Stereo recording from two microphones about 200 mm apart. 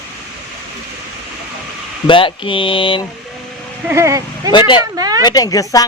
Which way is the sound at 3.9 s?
15° right (ahead or behind).